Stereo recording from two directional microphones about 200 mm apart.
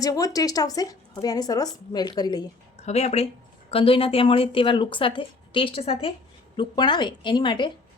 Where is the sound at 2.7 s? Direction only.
30° left (ahead or behind).